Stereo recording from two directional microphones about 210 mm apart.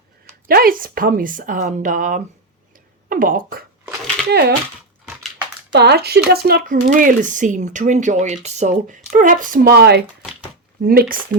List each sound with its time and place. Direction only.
0.4 s speech: 45° right (ahead or behind)
5.7 s speech: 50° right (ahead or behind)